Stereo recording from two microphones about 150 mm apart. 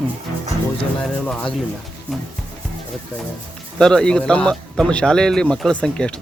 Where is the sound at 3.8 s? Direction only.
5° left (ahead or behind).